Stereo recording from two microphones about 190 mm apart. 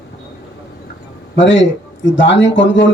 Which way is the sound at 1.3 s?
75° left (ahead or behind).